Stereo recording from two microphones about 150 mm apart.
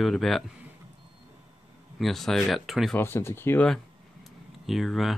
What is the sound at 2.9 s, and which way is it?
Speech, 15° left (ahead or behind).